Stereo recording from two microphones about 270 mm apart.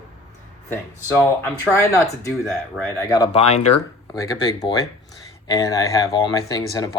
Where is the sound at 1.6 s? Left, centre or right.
Centre.